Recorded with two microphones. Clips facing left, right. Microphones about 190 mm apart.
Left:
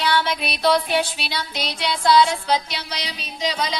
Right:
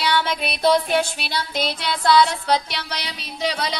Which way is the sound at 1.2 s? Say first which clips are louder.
Right 3 dB; 50° right (ahead or behind).